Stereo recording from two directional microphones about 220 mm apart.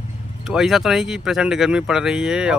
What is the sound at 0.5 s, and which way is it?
Speech, centre (ahead or behind).